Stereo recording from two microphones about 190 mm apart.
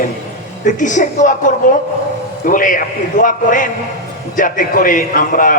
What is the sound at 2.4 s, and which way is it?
A man's voice, 45° left (ahead or behind).